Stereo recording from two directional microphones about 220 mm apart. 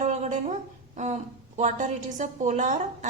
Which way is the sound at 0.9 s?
35° right (ahead or behind).